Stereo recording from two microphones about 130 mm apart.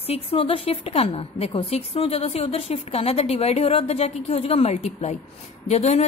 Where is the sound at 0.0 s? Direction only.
50° left (ahead or behind).